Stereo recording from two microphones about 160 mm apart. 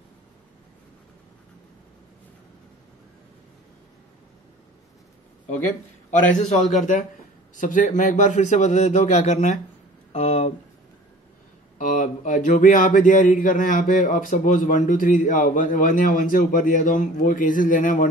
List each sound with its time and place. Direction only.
6.7 s a man's voice: 50° left (ahead or behind)
11.8 s speech: 55° left (ahead or behind)